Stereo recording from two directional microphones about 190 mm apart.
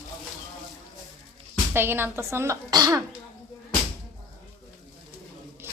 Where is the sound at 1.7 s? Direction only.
10° right (ahead or behind).